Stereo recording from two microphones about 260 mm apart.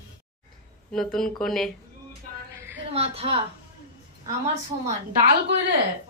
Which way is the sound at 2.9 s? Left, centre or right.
Right.